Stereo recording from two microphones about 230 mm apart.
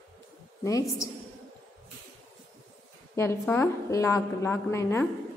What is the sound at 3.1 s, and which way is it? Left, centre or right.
A woman's voice, centre.